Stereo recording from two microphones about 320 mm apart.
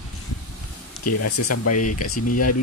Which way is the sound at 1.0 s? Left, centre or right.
Left.